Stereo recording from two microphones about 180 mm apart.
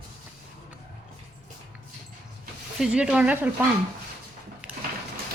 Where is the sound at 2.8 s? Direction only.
5° right (ahead or behind).